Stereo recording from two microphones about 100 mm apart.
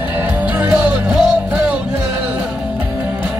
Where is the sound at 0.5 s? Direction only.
15° right (ahead or behind).